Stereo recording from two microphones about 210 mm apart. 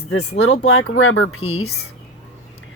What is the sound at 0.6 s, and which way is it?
Speech, 75° left (ahead or behind).